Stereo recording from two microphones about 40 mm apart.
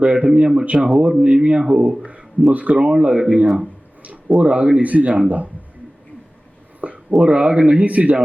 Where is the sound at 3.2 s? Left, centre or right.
Centre.